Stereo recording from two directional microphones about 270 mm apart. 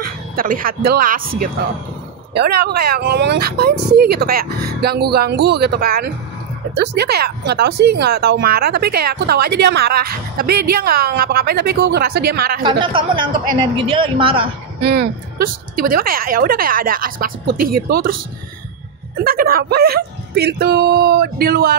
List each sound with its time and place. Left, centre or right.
0.0 s a woman's voice: right
12.6 s speech: centre
14.8 s a woman's voice: right
19.1 s a woman's voice: right